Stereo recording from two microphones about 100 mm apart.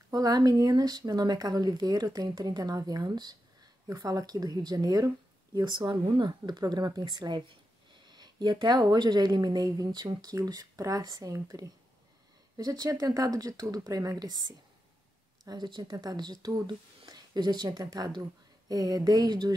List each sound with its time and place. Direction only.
0.1 s speech: 40° right (ahead or behind)
15.4 s speech: 45° right (ahead or behind)